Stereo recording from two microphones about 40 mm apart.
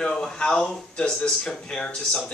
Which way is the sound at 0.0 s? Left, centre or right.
Centre.